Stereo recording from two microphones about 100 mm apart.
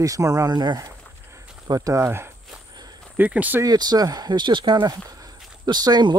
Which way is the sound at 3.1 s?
15° right (ahead or behind).